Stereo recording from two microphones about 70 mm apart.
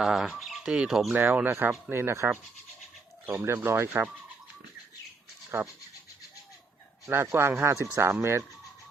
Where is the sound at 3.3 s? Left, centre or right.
Right.